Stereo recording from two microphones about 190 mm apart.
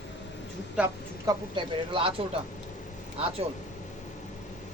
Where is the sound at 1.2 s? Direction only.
25° right (ahead or behind).